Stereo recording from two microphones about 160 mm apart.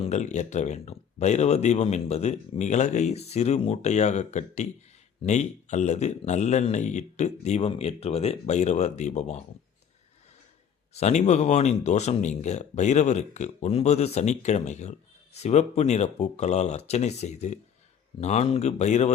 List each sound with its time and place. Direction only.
0.0 s speech: 45° left (ahead or behind)
10.9 s speech: 45° left (ahead or behind)